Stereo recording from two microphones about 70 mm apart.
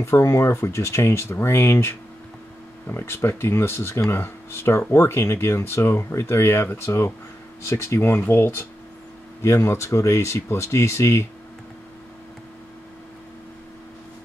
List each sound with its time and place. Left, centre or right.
0.0 s speech: left